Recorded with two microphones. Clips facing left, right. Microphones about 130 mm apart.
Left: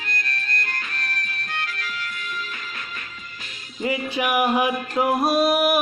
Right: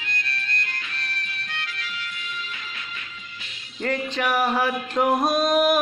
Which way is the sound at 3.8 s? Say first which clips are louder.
Left 1 dB; 10° left (ahead or behind).